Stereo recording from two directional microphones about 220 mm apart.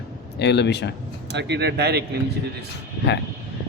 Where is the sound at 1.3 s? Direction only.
50° right (ahead or behind).